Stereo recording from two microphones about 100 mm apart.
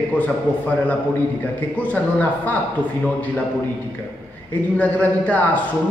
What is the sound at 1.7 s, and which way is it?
Mantra, 15° left (ahead or behind).